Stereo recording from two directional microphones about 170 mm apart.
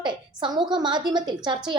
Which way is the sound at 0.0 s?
25° right (ahead or behind).